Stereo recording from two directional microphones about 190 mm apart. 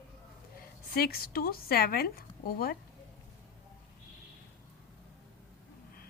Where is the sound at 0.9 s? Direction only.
55° left (ahead or behind).